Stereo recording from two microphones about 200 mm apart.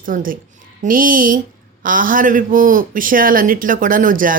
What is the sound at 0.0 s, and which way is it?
A woman's voice, 45° right (ahead or behind).